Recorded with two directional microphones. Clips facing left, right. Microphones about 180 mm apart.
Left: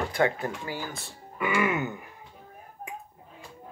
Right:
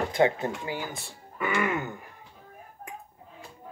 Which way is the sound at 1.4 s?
10° left (ahead or behind).